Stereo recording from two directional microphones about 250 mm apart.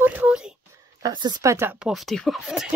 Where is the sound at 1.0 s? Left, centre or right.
Centre.